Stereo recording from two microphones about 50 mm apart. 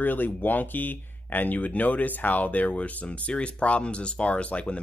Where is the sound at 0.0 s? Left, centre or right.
Left.